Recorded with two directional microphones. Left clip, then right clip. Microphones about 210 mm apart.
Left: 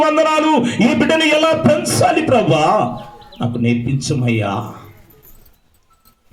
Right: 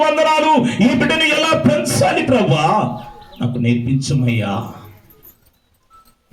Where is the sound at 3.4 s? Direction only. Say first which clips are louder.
Left 1 dB; 55° left (ahead or behind).